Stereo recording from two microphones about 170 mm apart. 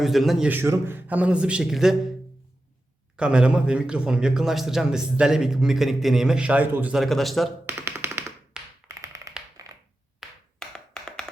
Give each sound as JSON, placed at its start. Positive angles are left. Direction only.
{"t": 0.0, "sound": "a man's voice", "side_deg": 0}
{"t": 3.2, "sound": "a man's voice", "side_deg": -5}
{"t": 7.7, "sound": "tap", "side_deg": -10}
{"t": 9.6, "sound": "a sound", "side_deg": -20}
{"t": 10.2, "sound": "tap", "side_deg": 5}